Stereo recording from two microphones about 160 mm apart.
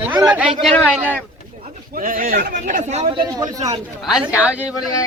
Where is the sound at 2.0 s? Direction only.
60° right (ahead or behind); by 3.2 s 45° right (ahead or behind).